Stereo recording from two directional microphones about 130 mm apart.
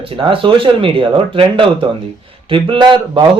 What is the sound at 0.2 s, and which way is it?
A man's voice, 40° right (ahead or behind).